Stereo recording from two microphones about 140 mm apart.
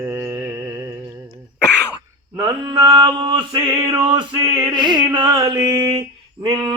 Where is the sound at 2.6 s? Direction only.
35° right (ahead or behind).